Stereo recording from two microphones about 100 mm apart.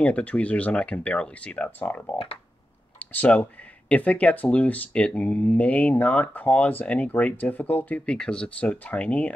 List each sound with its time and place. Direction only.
0.0 s speech: 15° left (ahead or behind)